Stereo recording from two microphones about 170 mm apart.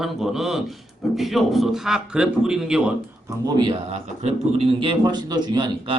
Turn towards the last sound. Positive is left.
turn(degrees=-25)  # may be behind; listen again after turning